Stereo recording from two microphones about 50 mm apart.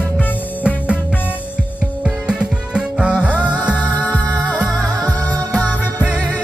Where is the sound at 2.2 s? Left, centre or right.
Centre.